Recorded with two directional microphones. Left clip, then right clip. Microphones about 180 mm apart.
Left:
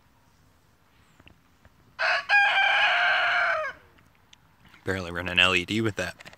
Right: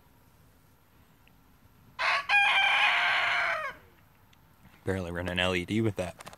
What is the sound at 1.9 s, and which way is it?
Chicken, 40° left (ahead or behind).